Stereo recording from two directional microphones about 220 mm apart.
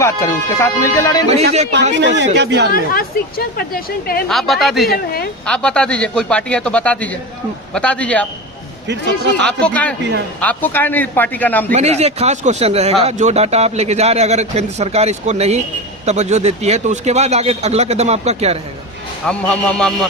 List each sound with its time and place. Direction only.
0.0 s speech: 10° left (ahead or behind)
1.7 s speech: 55° right (ahead or behind)
2.7 s a woman's voice: 40° left (ahead or behind)
4.3 s a man's voice: centre (ahead or behind)
4.9 s a woman's voice: 45° left (ahead or behind)
5.5 s a man's voice: 5° left (ahead or behind)
9.4 s a man's voice: 5° left (ahead or behind)
11.7 s speech: 30° right (ahead or behind)
19.3 s a man's voice: 5° left (ahead or behind)